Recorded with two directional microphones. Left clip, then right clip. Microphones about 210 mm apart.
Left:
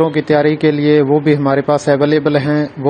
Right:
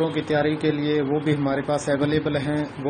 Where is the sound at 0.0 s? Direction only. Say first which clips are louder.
Left 10 dB; 35° left (ahead or behind).